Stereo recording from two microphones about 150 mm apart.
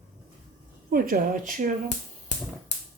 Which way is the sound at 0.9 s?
70° right (ahead or behind).